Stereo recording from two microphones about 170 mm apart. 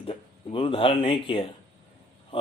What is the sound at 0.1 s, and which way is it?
Speech, 30° left (ahead or behind).